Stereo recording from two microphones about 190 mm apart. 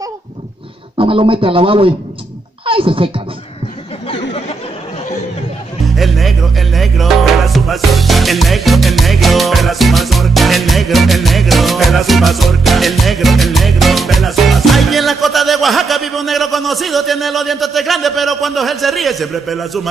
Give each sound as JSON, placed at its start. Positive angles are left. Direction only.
{"t": 0.9, "sound": "speech", "side_deg": -25}
{"t": 2.6, "sound": "music", "side_deg": -30}
{"t": 5.9, "sound": "music", "side_deg": 0}